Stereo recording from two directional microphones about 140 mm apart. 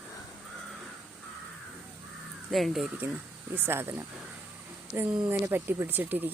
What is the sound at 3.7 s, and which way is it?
Speech, 15° right (ahead or behind).